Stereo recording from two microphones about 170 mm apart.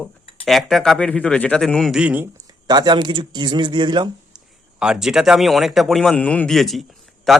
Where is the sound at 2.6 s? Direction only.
25° right (ahead or behind).